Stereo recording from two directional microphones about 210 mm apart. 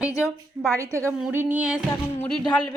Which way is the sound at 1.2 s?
10° right (ahead or behind).